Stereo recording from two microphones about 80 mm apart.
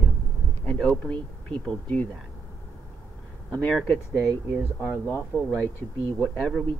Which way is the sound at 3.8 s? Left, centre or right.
Centre.